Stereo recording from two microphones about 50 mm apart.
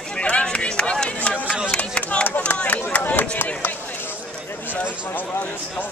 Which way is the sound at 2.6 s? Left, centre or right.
Left.